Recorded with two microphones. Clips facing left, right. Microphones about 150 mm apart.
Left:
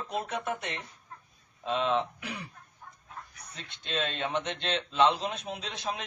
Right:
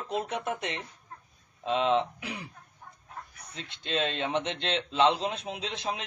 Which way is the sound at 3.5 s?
25° right (ahead or behind).